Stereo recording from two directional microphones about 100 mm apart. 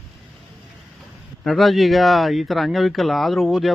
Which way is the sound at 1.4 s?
Centre (ahead or behind).